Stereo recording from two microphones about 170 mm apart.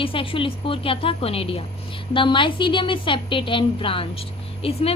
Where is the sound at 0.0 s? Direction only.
30° left (ahead or behind).